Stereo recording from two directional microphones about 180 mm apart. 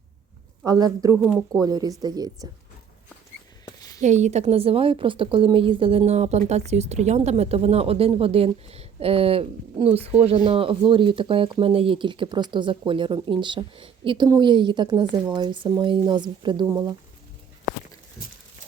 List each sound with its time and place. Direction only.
0.6 s speech: 20° right (ahead or behind)
1.2 s speech: centre (ahead or behind)
1.6 s speech: 20° right (ahead or behind)
3.8 s a sound: 20° left (ahead or behind)
4.0 s a woman's voice: 40° right (ahead or behind); by 16.9 s 25° right (ahead or behind)